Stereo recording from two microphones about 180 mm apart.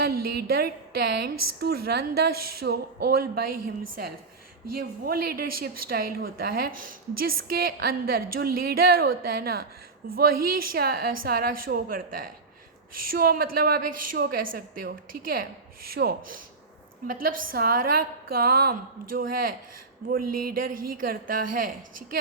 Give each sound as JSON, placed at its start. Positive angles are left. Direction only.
{"t": 0.0, "sound": "a woman's voice", "side_deg": -60}